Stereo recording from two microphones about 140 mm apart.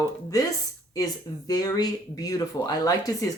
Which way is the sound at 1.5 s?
25° left (ahead or behind).